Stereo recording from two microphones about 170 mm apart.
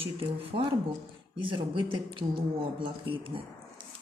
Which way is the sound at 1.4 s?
30° right (ahead or behind).